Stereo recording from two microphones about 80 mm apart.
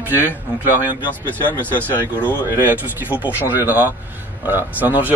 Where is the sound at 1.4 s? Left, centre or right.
Left.